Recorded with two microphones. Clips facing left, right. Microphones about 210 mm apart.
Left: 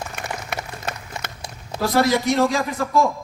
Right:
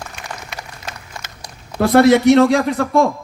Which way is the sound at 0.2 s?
55° left (ahead or behind).